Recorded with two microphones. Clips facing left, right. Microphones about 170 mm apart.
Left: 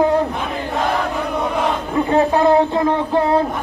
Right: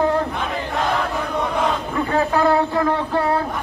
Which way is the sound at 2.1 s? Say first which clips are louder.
Left 4 dB; 20° left (ahead or behind).